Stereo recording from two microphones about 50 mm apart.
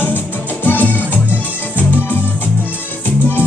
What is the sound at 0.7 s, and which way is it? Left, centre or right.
Music, left.